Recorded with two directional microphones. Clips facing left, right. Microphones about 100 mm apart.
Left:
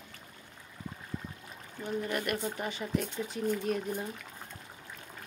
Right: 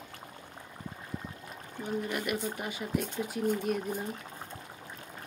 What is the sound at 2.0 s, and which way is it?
Speech, 5° right (ahead or behind).